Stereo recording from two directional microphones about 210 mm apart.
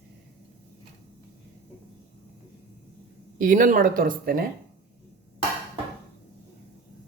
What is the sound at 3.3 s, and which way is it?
Speech, 40° right (ahead or behind).